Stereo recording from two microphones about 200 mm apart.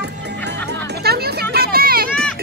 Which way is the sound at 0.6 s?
50° right (ahead or behind).